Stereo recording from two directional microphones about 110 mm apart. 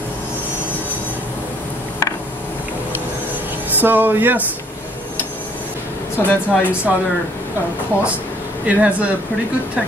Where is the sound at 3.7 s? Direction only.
15° right (ahead or behind).